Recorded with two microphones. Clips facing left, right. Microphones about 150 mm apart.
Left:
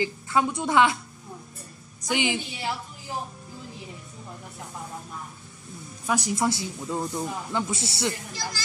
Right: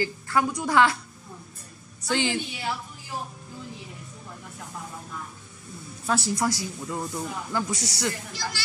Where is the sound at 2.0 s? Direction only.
15° left (ahead or behind).